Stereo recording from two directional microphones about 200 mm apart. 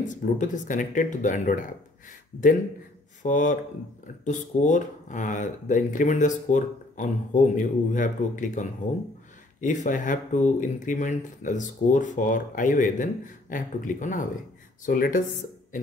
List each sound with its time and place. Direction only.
0.0 s speech: 40° left (ahead or behind)
3.2 s speech: 40° left (ahead or behind)